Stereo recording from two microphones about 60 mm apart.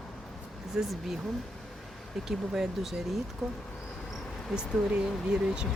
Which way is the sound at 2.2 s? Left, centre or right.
Centre.